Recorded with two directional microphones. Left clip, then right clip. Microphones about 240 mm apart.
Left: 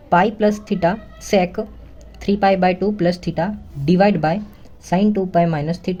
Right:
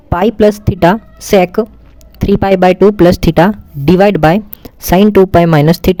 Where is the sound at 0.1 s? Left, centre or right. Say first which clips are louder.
Right 6 dB; right.